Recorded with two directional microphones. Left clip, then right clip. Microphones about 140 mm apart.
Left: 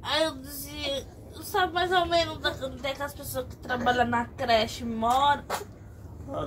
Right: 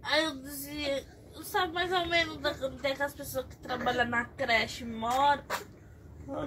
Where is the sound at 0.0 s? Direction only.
10° left (ahead or behind).